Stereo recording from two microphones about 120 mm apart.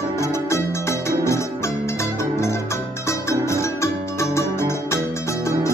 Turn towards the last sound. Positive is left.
turn(degrees=25)  # may be behind; listen again after turning